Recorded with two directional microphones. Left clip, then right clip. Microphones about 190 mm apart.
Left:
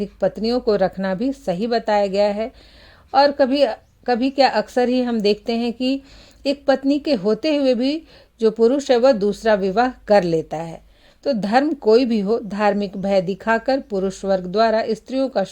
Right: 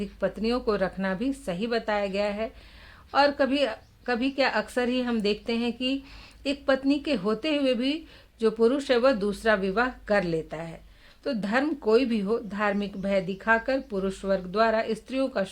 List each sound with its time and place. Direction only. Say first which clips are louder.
0.0 s speech: left 8 dB; 35° left (ahead or behind)